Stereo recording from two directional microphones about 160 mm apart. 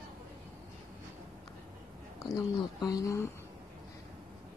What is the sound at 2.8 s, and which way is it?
Speech, 20° left (ahead or behind).